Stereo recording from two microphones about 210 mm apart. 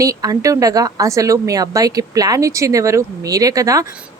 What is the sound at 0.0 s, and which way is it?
Speech, 15° right (ahead or behind).